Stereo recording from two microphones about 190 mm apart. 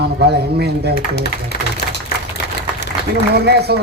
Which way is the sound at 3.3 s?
55° right (ahead or behind).